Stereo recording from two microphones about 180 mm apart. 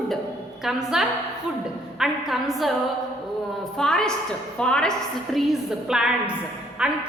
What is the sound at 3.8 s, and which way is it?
A woman's voice, 5° left (ahead or behind).